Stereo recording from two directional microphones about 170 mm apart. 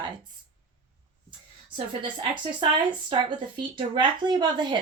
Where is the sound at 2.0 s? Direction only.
30° right (ahead or behind).